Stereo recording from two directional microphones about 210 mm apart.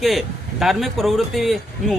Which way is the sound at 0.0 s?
Centre (ahead or behind).